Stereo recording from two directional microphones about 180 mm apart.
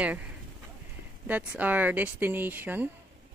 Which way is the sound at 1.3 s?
10° right (ahead or behind).